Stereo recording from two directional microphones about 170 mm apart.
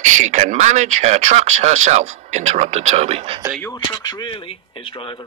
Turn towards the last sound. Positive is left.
turn(degrees=30)  # may be behind; listen again after turning